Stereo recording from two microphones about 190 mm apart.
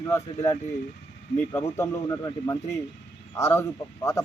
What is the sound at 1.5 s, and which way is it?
Speech, 15° left (ahead or behind).